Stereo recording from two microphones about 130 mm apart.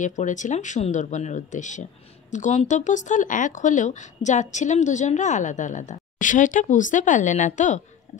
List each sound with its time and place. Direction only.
0.0 s speech: 70° left (ahead or behind)